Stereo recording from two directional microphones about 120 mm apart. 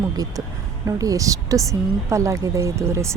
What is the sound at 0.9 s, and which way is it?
Speech, 30° right (ahead or behind).